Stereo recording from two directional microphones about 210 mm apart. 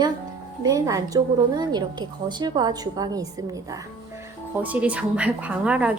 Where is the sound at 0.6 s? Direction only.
15° right (ahead or behind).